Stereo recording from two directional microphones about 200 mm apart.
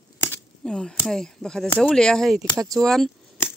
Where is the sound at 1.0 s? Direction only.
Centre (ahead or behind).